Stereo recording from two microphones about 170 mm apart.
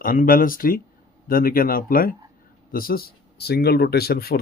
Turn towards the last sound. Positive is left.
turn(degrees=65)  # may be behind; listen again after turning